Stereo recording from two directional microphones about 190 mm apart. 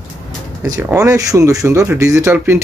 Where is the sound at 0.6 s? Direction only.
15° right (ahead or behind).